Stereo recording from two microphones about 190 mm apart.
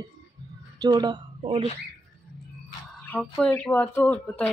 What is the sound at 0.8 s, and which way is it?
Speech, 20° right (ahead or behind).